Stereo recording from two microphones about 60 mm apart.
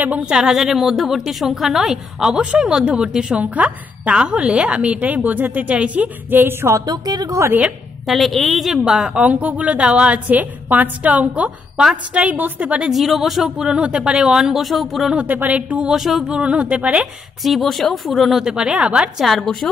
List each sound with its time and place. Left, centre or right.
0.2 s a woman's voice: centre
3.5 s a woman's voice: right
6.3 s speech: right
6.9 s a woman's voice: right
8.1 s a woman's voice: centre
8.9 s a woman's voice: centre
12.8 s speech: centre
15.3 s a woman's voice: right
15.9 s a woman's voice: centre
16.3 s a woman's voice: centre
17.4 s a woman's voice: centre
18.4 s speech: centre
19.1 s a woman's voice: centre